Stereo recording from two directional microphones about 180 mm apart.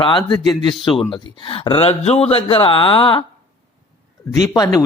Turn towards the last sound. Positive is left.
turn(degrees=20)  # may be behind; listen again after turning